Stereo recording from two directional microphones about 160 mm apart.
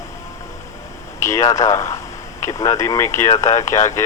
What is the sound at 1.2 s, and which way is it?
Speech, 20° left (ahead or behind).